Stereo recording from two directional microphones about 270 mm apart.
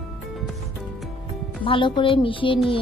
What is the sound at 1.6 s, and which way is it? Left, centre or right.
Speech, centre.